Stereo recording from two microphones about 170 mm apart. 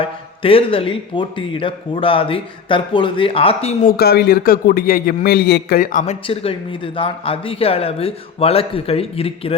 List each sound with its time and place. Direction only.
0.0 s a man's voice: 30° left (ahead or behind)
3.8 s a man's voice: 65° left (ahead or behind)
6.2 s a man's voice: 35° left (ahead or behind)